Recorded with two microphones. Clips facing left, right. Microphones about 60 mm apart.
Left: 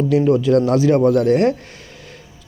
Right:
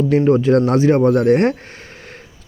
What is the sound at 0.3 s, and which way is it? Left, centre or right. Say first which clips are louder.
Speech: right 1 dB; right.